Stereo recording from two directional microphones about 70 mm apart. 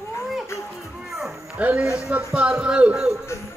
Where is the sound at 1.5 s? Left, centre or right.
Centre.